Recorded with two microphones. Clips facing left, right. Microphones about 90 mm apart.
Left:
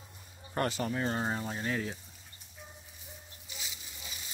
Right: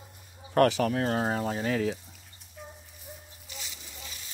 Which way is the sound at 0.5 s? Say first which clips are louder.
Right 9 dB; 80° right.